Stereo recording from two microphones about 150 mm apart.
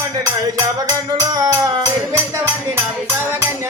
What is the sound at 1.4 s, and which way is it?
Music, 20° right (ahead or behind).